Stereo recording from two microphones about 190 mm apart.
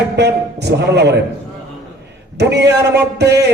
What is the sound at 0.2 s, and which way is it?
Speech, 60° right (ahead or behind).